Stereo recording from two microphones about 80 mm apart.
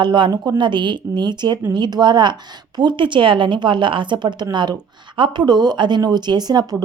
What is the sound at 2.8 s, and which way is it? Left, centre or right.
A woman's voice, right.